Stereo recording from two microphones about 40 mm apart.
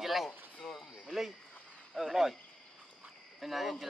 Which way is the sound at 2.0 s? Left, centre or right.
Centre.